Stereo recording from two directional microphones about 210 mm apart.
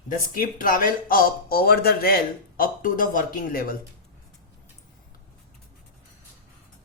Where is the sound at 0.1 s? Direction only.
40° left (ahead or behind).